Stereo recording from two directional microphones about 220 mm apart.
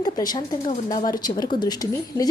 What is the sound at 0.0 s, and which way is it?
A woman's voice, 20° left (ahead or behind).